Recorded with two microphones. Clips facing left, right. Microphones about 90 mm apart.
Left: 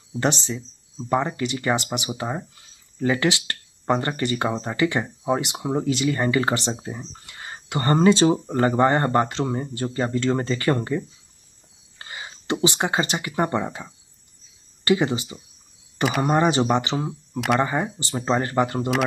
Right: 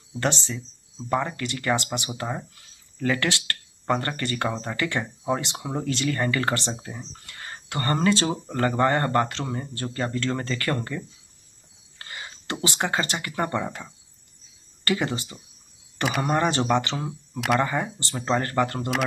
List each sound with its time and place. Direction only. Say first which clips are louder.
1.1 s speech: left 3 dB; 20° left (ahead or behind)